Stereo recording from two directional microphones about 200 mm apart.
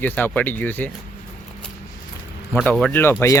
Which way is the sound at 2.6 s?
5° left (ahead or behind).